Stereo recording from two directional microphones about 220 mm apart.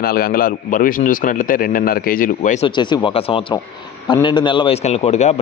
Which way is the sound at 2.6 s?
20° left (ahead or behind).